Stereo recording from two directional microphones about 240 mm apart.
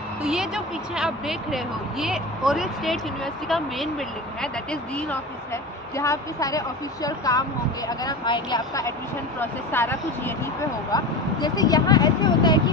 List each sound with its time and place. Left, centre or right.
0.2 s a woman's voice: centre
5.9 s speech: centre